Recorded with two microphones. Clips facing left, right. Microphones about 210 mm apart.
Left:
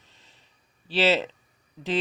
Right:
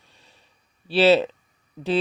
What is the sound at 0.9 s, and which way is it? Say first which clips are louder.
Speech: right 6 dB; 15° right (ahead or behind).